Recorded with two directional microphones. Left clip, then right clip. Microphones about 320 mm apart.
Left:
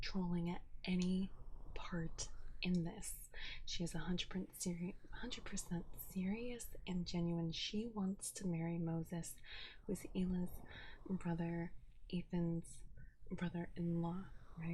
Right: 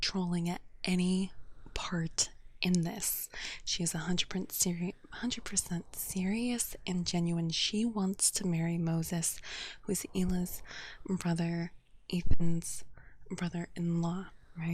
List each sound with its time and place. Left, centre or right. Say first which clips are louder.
0.0 s speech: right 10 dB; right